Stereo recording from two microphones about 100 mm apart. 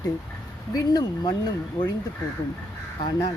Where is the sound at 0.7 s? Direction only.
40° left (ahead or behind).